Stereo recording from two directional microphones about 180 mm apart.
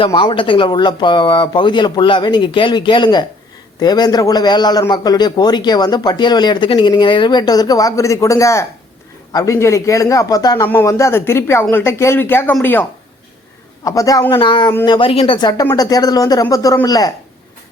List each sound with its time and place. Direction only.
0.0 s a man's voice: 25° left (ahead or behind); by 12.8 s 10° left (ahead or behind)
13.8 s a man's voice: 20° left (ahead or behind)